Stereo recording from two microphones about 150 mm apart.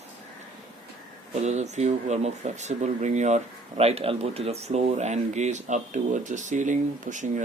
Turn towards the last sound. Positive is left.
turn(degrees=-55)  # may be behind; listen again after turning